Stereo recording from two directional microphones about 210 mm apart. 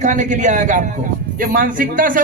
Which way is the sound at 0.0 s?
35° right (ahead or behind).